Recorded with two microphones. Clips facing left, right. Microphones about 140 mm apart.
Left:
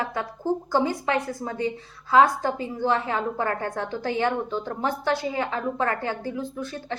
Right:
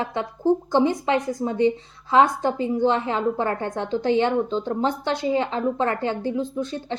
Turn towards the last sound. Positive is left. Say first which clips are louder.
# right 5 dB
turn(degrees=-20)  # may be behind; listen again after turning